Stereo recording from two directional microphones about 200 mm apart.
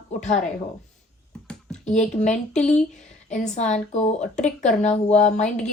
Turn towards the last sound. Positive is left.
turn(degrees=35)  # may be behind; listen again after turning